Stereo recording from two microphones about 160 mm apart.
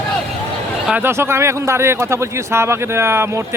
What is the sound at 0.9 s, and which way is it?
A man's voice, 10° right (ahead or behind).